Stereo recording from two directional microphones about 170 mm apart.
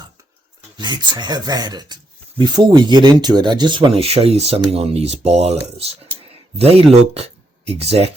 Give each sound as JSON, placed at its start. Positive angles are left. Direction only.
{"t": 0.8, "sound": "speech", "side_deg": -25}